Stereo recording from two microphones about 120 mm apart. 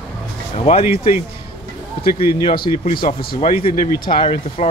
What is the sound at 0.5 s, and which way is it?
Speech, 60° left (ahead or behind).